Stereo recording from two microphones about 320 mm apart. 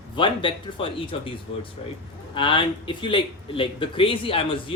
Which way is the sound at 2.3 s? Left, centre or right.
Centre.